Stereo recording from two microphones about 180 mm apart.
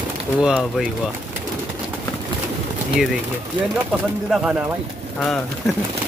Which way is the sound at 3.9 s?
Centre (ahead or behind).